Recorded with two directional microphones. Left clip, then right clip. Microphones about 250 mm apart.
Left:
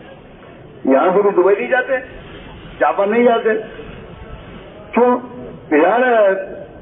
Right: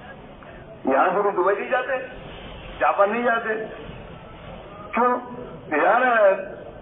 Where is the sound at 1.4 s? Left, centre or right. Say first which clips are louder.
Left 7 dB; left.